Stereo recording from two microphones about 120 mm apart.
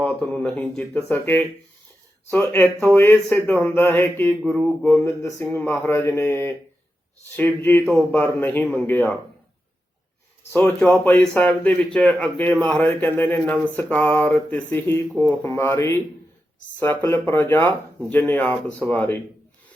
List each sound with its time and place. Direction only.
0.0 s speech: 10° left (ahead or behind)
5.0 s speech: 20° left (ahead or behind)
10.5 s speech: 15° left (ahead or behind)
17.0 s speech: 25° left (ahead or behind)